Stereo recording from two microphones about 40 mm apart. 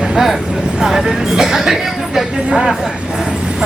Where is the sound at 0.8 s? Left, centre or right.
Centre.